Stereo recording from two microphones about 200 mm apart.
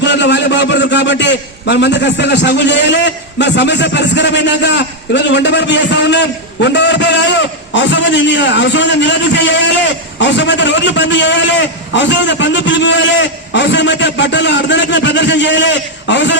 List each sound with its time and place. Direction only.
0.0 s a man's voice: 60° left (ahead or behind)